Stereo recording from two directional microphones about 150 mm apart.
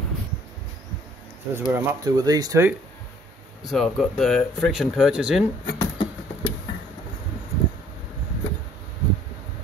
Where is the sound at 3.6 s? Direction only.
Centre (ahead or behind).